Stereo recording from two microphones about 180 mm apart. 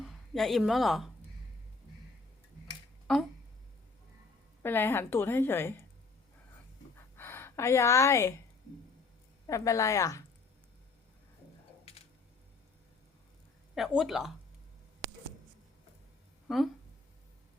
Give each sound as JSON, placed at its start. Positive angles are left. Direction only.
{"t": 0.0, "sound": "speech", "side_deg": 0}
{"t": 4.6, "sound": "a woman's voice", "side_deg": 10}
{"t": 6.9, "sound": "a sound", "side_deg": 15}
{"t": 9.5, "sound": "a woman's voice", "side_deg": 15}
{"t": 13.7, "sound": "speech", "side_deg": 0}
{"t": 16.5, "sound": "speech", "side_deg": 0}